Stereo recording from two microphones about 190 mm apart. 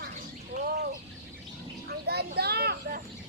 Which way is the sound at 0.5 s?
55° right (ahead or behind).